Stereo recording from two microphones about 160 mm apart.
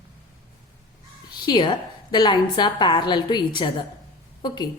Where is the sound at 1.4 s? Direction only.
30° left (ahead or behind).